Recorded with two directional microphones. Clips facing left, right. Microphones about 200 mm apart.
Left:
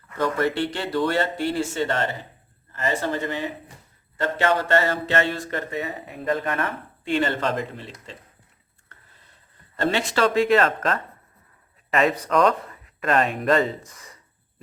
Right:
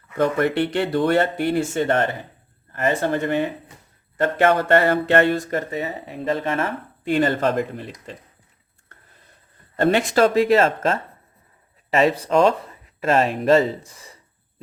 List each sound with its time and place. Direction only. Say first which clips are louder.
0.2 s speech: right 4 dB; 60° right (ahead or behind); by 5.8 s 40° right (ahead or behind)
6.4 s speech: right 3 dB; 25° right (ahead or behind)
7.0 s speech: right 4 dB; 45° right (ahead or behind)
9.7 s speech: right 5 dB; 50° right (ahead or behind); by 11.0 s 30° right (ahead or behind)
12.2 s speech: right 3 dB; 25° right (ahead or behind)
13.8 s speech: right 1 dB; 10° right (ahead or behind)